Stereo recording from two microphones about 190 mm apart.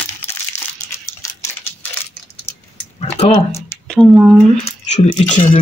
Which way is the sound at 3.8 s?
5° left (ahead or behind).